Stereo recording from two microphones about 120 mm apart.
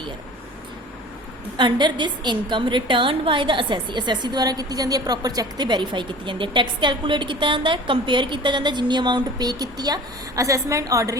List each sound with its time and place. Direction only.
1.5 s a woman's voice: 40° right (ahead or behind)